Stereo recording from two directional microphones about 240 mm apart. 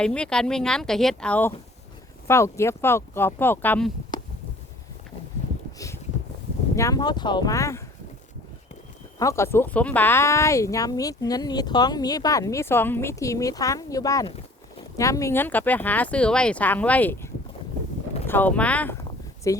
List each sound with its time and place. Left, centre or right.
0.0 s speech: centre
6.7 s speech: centre
9.1 s speech: centre